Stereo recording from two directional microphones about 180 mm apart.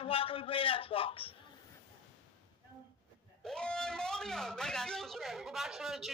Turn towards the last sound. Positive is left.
turn(degrees=0)  # may be behind; listen again after turning